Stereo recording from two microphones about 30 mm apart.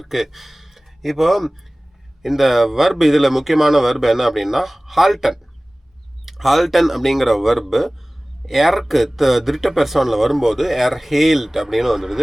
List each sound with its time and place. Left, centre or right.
0.0 s speech: centre